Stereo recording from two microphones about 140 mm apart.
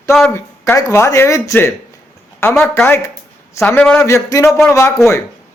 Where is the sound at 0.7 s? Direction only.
20° left (ahead or behind).